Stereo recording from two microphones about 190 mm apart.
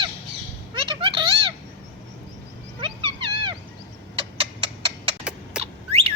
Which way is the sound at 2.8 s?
25° right (ahead or behind).